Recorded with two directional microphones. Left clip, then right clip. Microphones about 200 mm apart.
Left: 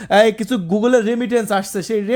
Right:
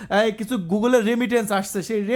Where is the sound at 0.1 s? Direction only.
20° left (ahead or behind).